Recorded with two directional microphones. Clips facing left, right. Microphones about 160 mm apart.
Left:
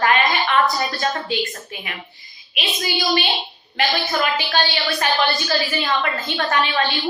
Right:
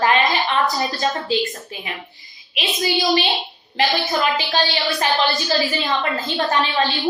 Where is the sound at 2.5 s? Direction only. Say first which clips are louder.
Right 3 dB; 25° right (ahead or behind).